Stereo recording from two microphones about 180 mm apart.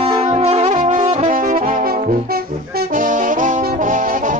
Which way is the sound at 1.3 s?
50° right (ahead or behind).